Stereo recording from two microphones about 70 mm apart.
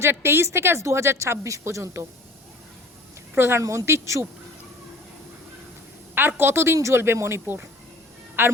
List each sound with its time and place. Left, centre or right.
0.0 s a woman's voice: right
3.3 s a woman's voice: right
3.6 s speech: right
6.1 s a woman's voice: right